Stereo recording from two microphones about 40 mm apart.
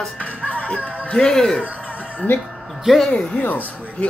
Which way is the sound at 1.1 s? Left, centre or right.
Centre.